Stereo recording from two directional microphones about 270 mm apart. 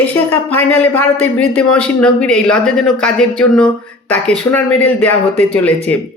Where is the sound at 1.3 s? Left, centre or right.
Centre.